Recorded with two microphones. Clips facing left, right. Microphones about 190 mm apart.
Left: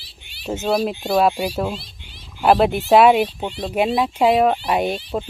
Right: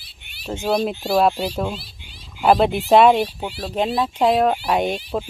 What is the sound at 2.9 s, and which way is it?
Speech, 5° left (ahead or behind).